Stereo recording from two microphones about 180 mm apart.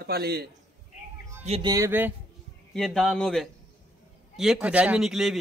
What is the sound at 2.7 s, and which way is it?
Speech, centre (ahead or behind).